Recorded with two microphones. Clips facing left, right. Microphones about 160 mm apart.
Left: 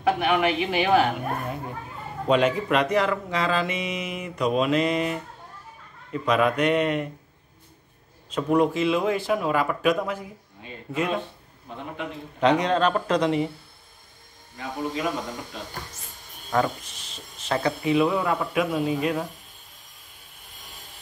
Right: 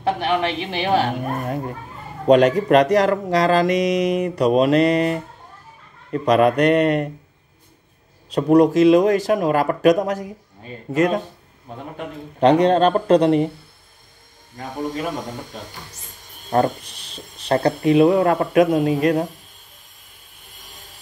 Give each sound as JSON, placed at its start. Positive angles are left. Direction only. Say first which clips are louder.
{"t": 0.0, "sound": "speech", "louder": "right 1 dB", "side_deg": -30}
{"t": 2.5, "sound": "speech", "louder": "right 8 dB", "side_deg": -40}
{"t": 6.2, "sound": "speech", "louder": "right 6 dB", "side_deg": -35}
{"t": 8.3, "sound": "a man's voice", "louder": "right 7 dB", "side_deg": -40}
{"t": 14.6, "sound": "a man's voice", "louder": "right 2 dB", "side_deg": -45}
{"t": 16.4, "sound": "speech", "louder": "right 5 dB", "side_deg": -45}
{"t": 17.1, "sound": "a sound", "louder": "right 7 dB", "side_deg": -35}
{"t": 17.6, "sound": "a man's voice", "louder": "right 7 dB", "side_deg": -60}
{"t": 18.9, "sound": "speech", "louder": "right 7 dB", "side_deg": -75}